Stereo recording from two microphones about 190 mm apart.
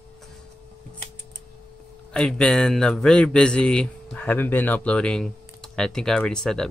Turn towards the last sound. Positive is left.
turn(degrees=5)  # may be behind; listen again after turning